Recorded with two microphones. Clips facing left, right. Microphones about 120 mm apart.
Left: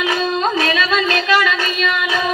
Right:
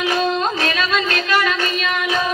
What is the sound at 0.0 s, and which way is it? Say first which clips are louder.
Music: left 1 dB; 40° right (ahead or behind).